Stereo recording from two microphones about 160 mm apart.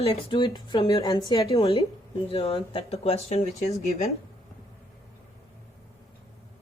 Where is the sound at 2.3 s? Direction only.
35° left (ahead or behind).